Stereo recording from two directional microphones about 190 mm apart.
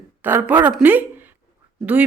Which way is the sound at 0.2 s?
10° right (ahead or behind).